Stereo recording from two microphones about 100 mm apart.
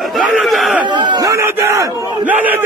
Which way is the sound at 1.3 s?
30° right (ahead or behind).